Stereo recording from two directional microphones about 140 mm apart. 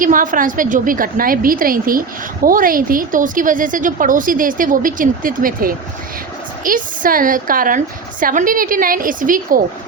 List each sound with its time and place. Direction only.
0.0 s a woman's voice: 75° right (ahead or behind); by 5.7 s 90° right
6.7 s a woman's voice: 80° right
8.2 s a woman's voice: 75° right (ahead or behind)